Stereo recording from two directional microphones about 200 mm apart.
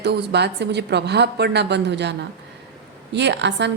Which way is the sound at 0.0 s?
55° right (ahead or behind).